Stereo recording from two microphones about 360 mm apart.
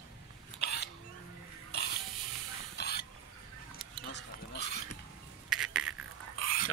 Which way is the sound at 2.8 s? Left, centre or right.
Left.